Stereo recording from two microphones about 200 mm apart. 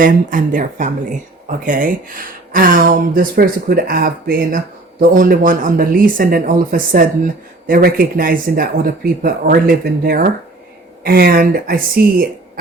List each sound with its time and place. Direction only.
0.0 s speech: 40° right (ahead or behind)